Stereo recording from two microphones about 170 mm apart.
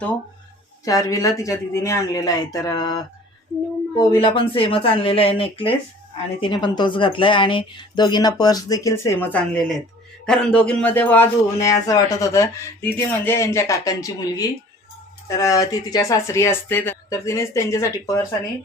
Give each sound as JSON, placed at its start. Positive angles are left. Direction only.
{"t": 0.9, "sound": "a man's voice", "side_deg": 20}